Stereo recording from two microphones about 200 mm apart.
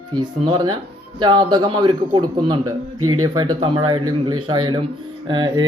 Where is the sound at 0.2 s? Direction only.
20° right (ahead or behind).